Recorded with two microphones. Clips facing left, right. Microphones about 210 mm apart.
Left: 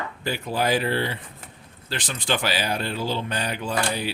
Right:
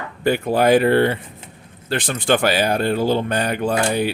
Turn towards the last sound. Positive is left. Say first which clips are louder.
# right 7 dB
turn(degrees=-55)  # may be behind; listen again after turning